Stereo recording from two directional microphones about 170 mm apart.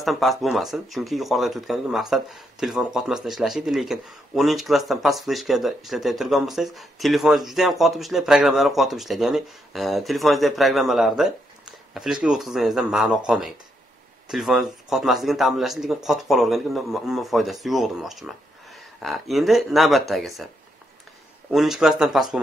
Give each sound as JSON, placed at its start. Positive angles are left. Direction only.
{"t": 0.0, "sound": "speech", "side_deg": 0}
{"t": 21.5, "sound": "speech", "side_deg": 0}